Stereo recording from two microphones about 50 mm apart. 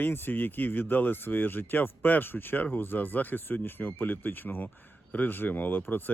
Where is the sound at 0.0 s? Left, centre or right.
Left.